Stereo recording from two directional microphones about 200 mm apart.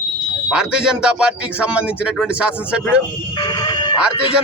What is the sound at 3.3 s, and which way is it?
Music, 20° left (ahead or behind).